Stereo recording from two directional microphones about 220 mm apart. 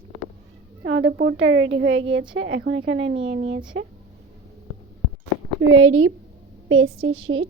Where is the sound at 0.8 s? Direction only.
60° right (ahead or behind).